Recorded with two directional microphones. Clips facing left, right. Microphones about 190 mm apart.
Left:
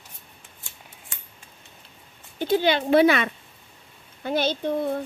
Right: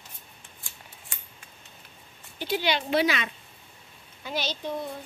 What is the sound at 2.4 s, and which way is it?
A woman's voice, 50° left (ahead or behind).